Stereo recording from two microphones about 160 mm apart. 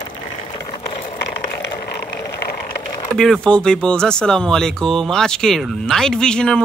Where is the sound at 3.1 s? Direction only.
5° left (ahead or behind).